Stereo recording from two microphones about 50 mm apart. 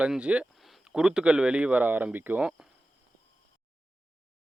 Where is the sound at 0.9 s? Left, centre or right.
Centre.